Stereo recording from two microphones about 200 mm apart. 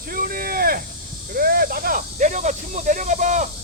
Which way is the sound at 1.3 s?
45° right (ahead or behind).